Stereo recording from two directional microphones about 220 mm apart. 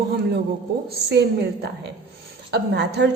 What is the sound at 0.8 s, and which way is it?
Speech, 45° right (ahead or behind).